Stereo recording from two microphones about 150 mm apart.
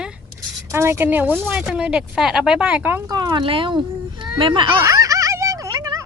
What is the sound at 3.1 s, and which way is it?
Speech, 25° right (ahead or behind).